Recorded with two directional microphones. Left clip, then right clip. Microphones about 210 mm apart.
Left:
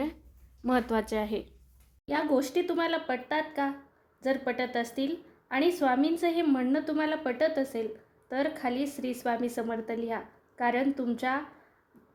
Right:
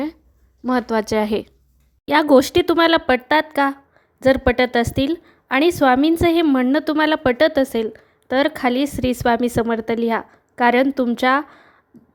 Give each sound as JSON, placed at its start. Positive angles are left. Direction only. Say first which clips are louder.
{"t": 0.6, "sound": "a woman's voice", "louder": "right 8 dB", "side_deg": -30}